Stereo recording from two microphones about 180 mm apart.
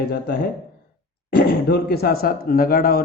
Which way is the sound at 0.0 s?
65° left (ahead or behind).